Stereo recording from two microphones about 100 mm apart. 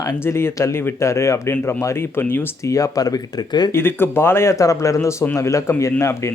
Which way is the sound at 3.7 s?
25° left (ahead or behind).